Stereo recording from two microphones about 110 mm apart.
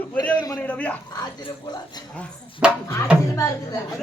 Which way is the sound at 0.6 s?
10° left (ahead or behind).